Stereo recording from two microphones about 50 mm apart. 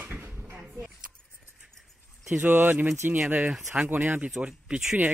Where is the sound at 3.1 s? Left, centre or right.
Right.